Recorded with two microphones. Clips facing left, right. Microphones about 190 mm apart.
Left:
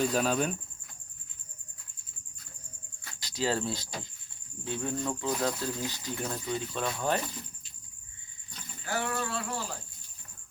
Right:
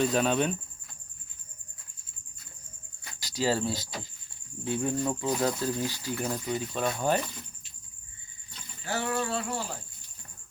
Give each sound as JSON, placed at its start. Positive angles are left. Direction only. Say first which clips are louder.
{"t": 0.0, "sound": "speech", "louder": "right 2 dB", "side_deg": 0}
{"t": 3.2, "sound": "speech", "louder": "right 3 dB", "side_deg": -5}
{"t": 8.9, "sound": "a sound", "louder": "right 3 dB", "side_deg": -25}